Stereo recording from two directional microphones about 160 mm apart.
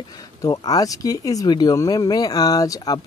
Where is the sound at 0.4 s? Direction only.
20° left (ahead or behind).